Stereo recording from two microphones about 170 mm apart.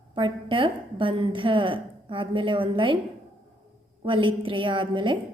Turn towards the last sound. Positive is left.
turn(degrees=-30)  # may be behind; listen again after turning